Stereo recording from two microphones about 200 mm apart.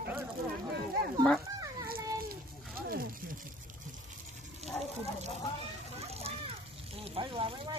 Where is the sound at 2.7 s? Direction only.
45° right (ahead or behind).